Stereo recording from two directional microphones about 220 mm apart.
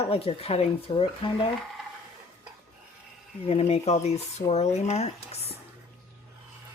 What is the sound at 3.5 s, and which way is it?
Speech, 30° left (ahead or behind).